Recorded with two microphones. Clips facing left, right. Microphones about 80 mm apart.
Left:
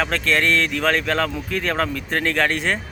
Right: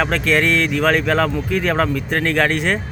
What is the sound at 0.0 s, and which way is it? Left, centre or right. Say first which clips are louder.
Speech: right 3 dB; centre.